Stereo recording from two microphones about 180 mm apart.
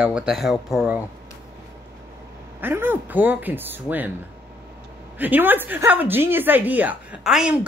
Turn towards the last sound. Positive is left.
turn(degrees=-5)  # may be behind; listen again after turning